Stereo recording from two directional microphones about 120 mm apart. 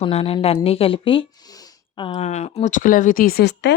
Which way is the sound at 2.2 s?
65° left (ahead or behind).